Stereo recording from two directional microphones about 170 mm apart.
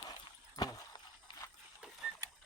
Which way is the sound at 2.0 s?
5° right (ahead or behind).